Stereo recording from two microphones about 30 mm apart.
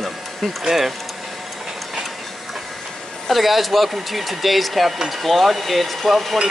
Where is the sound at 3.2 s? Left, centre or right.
Centre.